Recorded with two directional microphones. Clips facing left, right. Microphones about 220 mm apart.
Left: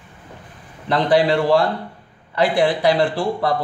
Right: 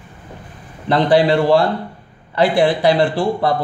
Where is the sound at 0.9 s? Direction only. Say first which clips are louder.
Right 3 dB; 30° right (ahead or behind).